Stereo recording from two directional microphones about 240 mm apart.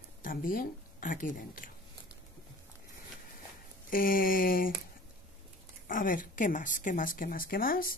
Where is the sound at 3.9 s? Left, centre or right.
Left.